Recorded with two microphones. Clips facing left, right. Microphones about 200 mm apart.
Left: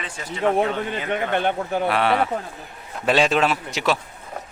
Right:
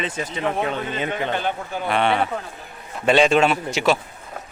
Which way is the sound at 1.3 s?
60° left (ahead or behind).